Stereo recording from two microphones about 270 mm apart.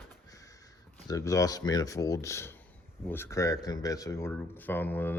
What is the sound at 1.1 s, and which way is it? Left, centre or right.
Speech, centre.